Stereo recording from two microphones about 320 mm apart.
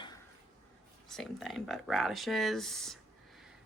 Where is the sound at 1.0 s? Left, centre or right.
Centre.